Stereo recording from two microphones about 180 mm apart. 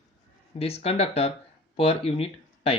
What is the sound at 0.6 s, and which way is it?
Speech, 35° left (ahead or behind).